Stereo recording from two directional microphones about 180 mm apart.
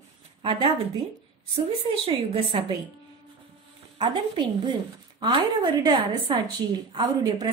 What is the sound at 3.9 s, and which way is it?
A woman's voice, 25° right (ahead or behind).